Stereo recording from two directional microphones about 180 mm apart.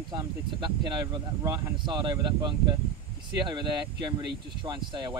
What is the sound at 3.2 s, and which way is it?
Speech, 25° right (ahead or behind).